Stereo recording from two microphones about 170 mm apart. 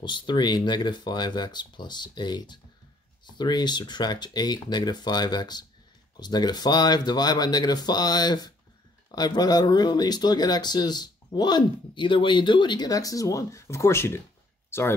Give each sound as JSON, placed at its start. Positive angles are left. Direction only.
{"t": 0.0, "sound": "speech", "side_deg": 25}